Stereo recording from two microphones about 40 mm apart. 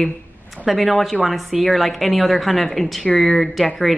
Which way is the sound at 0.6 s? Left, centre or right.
Centre.